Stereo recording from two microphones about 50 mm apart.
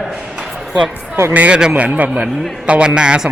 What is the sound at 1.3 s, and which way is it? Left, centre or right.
A man's voice, right.